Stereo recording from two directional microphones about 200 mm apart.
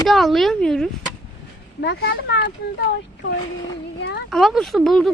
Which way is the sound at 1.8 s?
55° left (ahead or behind).